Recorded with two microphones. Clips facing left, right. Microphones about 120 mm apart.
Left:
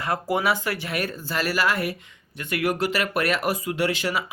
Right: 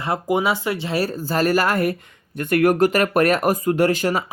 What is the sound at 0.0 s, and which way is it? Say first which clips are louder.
Speech: right 3 dB; 20° right (ahead or behind).